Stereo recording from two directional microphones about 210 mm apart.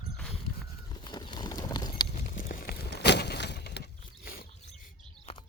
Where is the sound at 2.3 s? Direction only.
40° left (ahead or behind).